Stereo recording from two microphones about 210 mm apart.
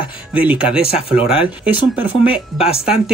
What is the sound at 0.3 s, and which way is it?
Speech, 5° right (ahead or behind).